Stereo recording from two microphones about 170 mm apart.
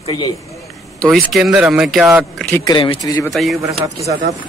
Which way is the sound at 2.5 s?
20° left (ahead or behind).